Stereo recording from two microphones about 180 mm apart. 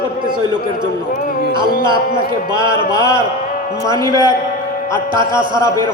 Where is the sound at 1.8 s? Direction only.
25° right (ahead or behind).